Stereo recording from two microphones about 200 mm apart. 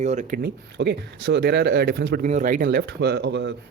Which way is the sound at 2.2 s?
40° right (ahead or behind).